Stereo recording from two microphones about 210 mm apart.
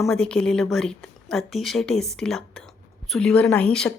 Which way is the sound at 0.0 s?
5° left (ahead or behind).